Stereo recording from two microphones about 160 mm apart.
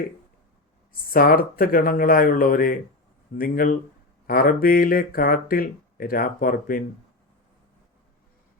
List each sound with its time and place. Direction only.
1.1 s speech: 65° left (ahead or behind)